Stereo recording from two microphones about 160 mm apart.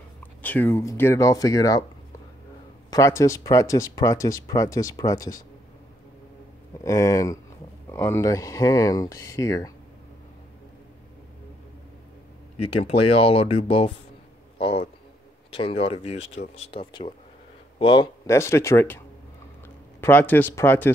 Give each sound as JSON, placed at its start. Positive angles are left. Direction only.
{"t": 0.2, "sound": "speech", "side_deg": 10}
{"t": 2.9, "sound": "speech", "side_deg": 20}
{"t": 6.8, "sound": "speech", "side_deg": 20}
{"t": 12.6, "sound": "speech", "side_deg": 35}
{"t": 14.6, "sound": "a sound", "side_deg": 40}
{"t": 15.5, "sound": "speech", "side_deg": 35}
{"t": 18.2, "sound": "speech", "side_deg": 15}